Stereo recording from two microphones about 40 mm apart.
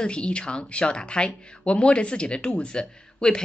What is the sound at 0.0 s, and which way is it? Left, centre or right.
Speech, left.